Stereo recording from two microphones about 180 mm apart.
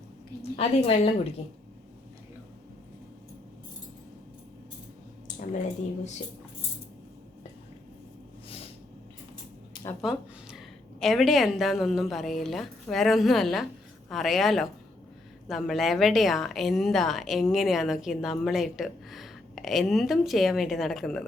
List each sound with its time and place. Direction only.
0.5 s a woman's voice: 35° left (ahead or behind)
10.0 s a sound: centre (ahead or behind)
11.0 s speech: centre (ahead or behind)